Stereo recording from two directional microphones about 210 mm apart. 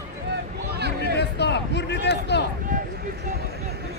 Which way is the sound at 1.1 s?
55° left (ahead or behind).